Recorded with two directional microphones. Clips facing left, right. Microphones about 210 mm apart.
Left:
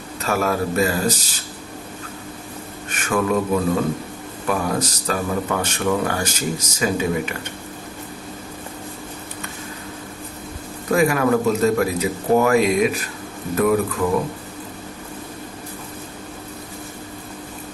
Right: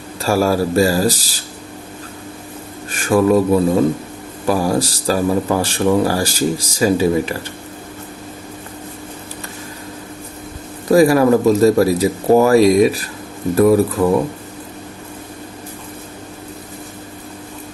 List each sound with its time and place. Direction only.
0.2 s speech: 35° right (ahead or behind)
2.9 s speech: 35° right (ahead or behind)
10.9 s speech: 35° right (ahead or behind)